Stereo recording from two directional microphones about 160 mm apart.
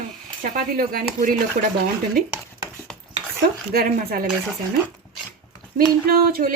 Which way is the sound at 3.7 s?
65° right (ahead or behind).